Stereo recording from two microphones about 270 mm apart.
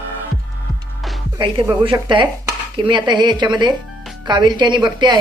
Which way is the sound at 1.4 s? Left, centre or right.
Centre.